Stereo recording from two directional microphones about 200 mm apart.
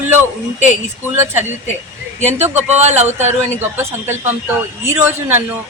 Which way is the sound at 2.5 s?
35° right (ahead or behind).